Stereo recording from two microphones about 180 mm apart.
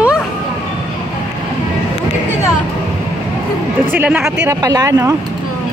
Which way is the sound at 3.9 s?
10° right (ahead or behind).